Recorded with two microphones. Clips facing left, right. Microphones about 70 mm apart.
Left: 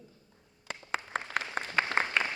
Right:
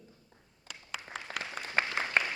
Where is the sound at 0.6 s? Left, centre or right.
Left.